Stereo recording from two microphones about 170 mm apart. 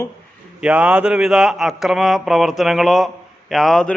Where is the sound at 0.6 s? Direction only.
5° right (ahead or behind).